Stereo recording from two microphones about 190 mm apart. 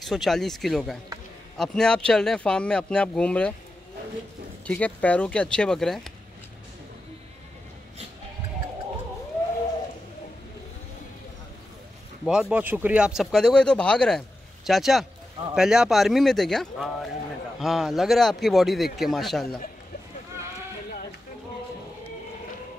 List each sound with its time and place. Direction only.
0.0 s speech: centre (ahead or behind)
4.6 s speech: 5° left (ahead or behind)
12.3 s speech: 5° right (ahead or behind)